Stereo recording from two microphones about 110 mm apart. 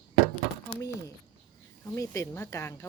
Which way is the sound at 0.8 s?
30° left (ahead or behind).